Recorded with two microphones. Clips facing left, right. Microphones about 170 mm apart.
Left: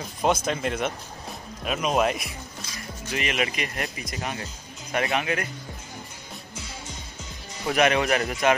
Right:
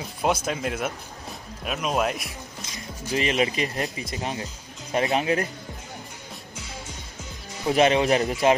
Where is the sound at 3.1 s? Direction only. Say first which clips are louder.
Right 4 dB; 30° right (ahead or behind).